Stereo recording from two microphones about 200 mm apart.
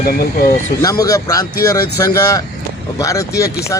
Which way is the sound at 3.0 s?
15° left (ahead or behind).